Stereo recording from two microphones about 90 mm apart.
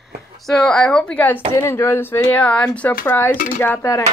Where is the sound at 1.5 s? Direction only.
30° left (ahead or behind).